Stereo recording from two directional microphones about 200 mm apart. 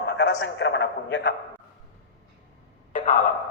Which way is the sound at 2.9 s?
40° left (ahead or behind).